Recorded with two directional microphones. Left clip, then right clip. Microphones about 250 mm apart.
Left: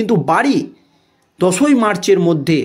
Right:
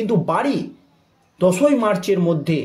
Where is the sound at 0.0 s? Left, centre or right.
Left.